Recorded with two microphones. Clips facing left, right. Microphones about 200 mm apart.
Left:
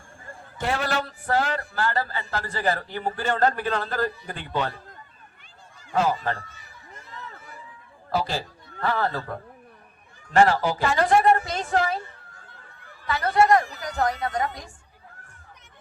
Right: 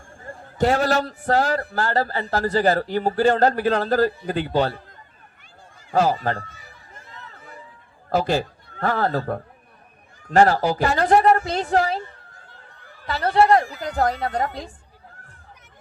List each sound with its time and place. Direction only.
0.3 s a man's voice: 40° right (ahead or behind)
5.9 s a man's voice: 35° right (ahead or behind)
8.1 s a man's voice: 50° right (ahead or behind)
13.1 s a man's voice: 30° right (ahead or behind)